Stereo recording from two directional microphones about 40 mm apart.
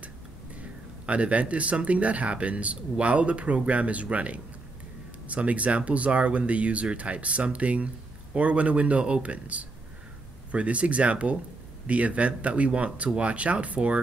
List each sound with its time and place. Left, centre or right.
1.0 s speech: right